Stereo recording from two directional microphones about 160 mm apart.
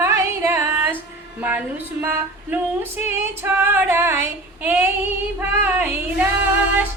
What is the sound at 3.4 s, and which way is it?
Female singing, 15° right (ahead or behind).